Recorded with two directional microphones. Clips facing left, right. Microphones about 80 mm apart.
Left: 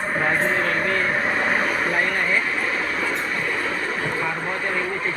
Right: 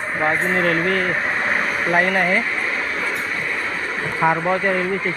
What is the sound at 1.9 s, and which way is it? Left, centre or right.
Speech, right.